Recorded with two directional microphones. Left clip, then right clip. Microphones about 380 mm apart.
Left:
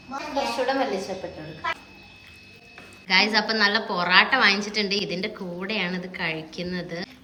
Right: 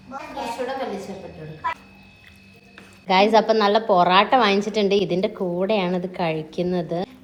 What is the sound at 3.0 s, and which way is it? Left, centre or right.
A woman's voice, centre.